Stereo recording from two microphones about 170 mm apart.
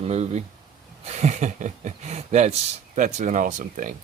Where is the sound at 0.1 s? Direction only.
40° right (ahead or behind).